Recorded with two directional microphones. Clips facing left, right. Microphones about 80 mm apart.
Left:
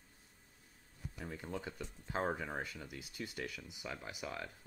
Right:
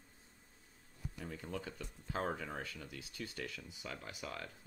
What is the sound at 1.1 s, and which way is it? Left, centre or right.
Speech, left.